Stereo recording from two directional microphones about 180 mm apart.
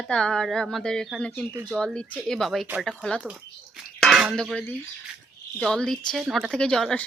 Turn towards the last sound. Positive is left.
turn(degrees=5)  # may be behind; listen again after turning